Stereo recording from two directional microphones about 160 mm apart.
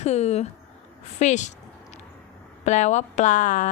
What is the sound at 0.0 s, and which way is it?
Speech, 45° left (ahead or behind).